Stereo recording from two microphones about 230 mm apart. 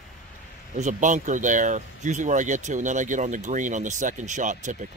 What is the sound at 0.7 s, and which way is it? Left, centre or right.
Speech, right.